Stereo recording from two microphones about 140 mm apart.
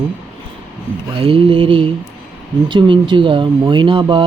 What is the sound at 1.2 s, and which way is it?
Speech, 40° right (ahead or behind).